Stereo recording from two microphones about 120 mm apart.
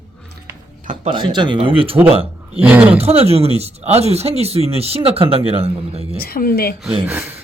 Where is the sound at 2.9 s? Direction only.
55° right (ahead or behind).